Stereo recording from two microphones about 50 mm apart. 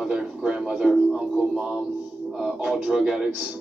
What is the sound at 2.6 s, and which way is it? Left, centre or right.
Speech, centre.